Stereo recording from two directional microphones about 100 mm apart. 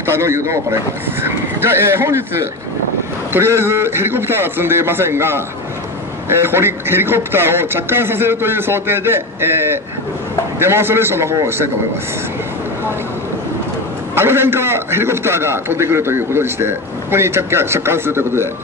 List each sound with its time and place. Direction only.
0.0 s a man's voice: 25° right (ahead or behind)
14.1 s a man's voice: 25° right (ahead or behind)